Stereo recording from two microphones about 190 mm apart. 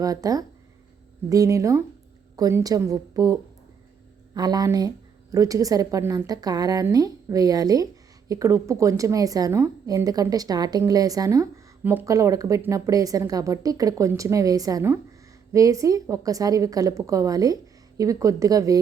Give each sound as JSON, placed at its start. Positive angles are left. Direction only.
{"t": 0.0, "sound": "a woman's voice", "side_deg": -20}
{"t": 4.4, "sound": "a woman's voice", "side_deg": -20}